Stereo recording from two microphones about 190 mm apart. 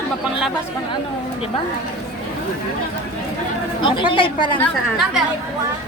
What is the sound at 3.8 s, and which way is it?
Speech, 25° left (ahead or behind).